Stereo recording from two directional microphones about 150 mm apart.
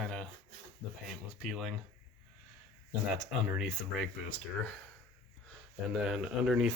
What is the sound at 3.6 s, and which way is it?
Speech, centre (ahead or behind).